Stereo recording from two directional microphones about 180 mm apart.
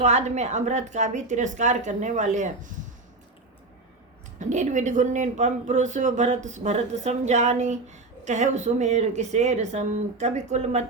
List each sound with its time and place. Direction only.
0.0 s speech: 40° right (ahead or behind)
4.4 s speech: 40° right (ahead or behind)